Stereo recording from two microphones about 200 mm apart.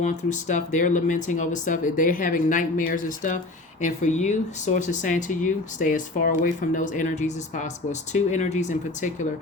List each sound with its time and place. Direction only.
0.0 s speech: 35° left (ahead or behind)